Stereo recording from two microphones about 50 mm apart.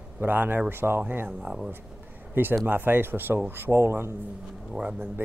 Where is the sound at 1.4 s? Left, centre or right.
Centre.